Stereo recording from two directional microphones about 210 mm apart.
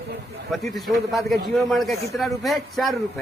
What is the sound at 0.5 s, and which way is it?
Speech, centre (ahead or behind).